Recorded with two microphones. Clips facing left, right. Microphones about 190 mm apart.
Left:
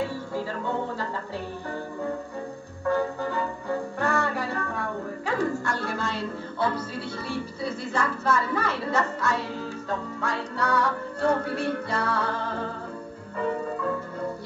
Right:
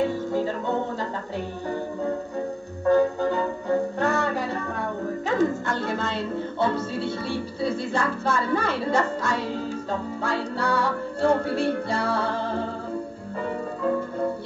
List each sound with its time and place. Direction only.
2.9 s music: 20° right (ahead or behind)